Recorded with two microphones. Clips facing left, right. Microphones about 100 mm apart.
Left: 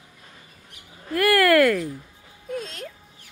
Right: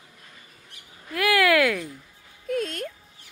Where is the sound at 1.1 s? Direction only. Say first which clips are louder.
Left 3 dB; centre (ahead or behind).